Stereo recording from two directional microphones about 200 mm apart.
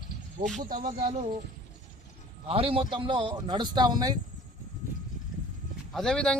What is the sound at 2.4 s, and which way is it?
A man's voice, 25° right (ahead or behind).